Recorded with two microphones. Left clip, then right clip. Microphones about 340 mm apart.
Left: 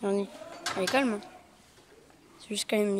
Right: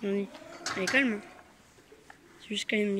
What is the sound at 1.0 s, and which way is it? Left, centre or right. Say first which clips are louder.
Speech: right 1 dB; centre.